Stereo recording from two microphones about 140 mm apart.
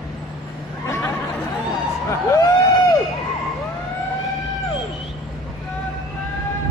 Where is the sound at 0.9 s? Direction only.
20° left (ahead or behind).